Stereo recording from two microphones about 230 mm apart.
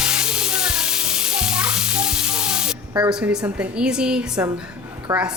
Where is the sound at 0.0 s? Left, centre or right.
Centre.